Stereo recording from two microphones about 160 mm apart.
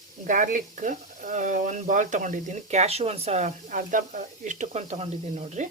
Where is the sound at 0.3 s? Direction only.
55° right (ahead or behind).